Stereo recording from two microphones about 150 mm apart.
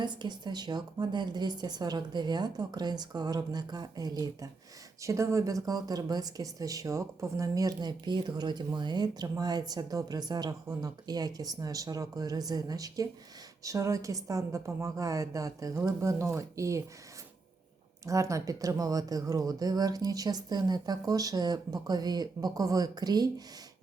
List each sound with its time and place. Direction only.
0.0 s speech: 30° right (ahead or behind)
18.0 s speech: 20° right (ahead or behind)